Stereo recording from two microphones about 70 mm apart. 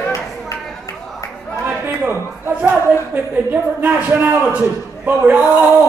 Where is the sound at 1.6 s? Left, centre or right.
Right.